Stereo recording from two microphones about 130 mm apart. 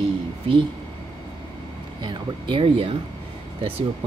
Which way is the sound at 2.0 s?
35° right (ahead or behind).